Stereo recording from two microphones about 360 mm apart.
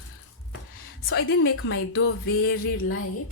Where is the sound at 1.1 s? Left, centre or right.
Left.